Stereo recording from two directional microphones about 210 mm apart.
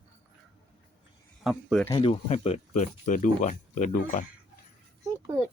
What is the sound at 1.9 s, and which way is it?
Speech, 25° left (ahead or behind).